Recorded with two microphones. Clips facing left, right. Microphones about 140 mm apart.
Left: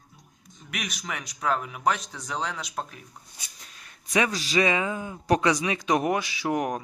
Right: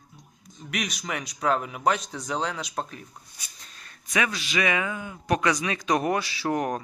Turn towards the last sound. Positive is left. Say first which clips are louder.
# even
turn(degrees=15)  # may be behind; listen again after turning